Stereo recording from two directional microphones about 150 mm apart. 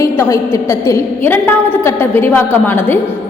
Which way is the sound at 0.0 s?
15° left (ahead or behind).